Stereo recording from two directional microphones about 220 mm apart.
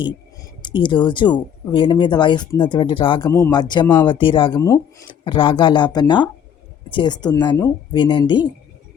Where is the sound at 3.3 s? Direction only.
10° left (ahead or behind).